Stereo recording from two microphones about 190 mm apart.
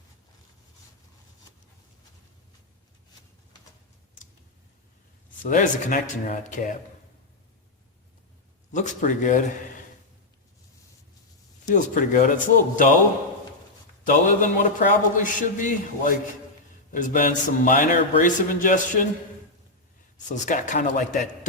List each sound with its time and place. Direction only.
5.4 s speech: 45° left (ahead or behind)
8.7 s speech: 40° left (ahead or behind)
11.7 s a man's voice: 45° left (ahead or behind)
14.1 s a man's voice: 45° left (ahead or behind)
20.2 s speech: 40° left (ahead or behind)